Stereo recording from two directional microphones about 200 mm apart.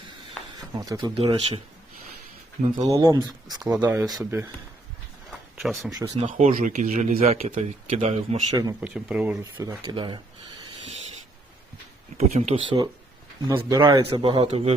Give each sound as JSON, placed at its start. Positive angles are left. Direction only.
{"t": 0.6, "sound": "speech", "side_deg": -20}
{"t": 2.8, "sound": "speech", "side_deg": -15}
{"t": 5.5, "sound": "speech", "side_deg": 0}
{"t": 6.1, "sound": "speech", "side_deg": -35}
{"t": 8.8, "sound": "speech", "side_deg": -5}
{"t": 9.4, "sound": "speech", "side_deg": -20}
{"t": 12.1, "sound": "speech", "side_deg": -35}